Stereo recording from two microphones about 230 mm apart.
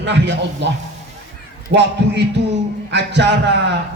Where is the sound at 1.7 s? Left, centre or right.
Right.